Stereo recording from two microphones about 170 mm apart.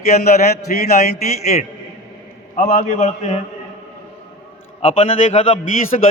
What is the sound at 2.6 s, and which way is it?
Speech, 50° left (ahead or behind).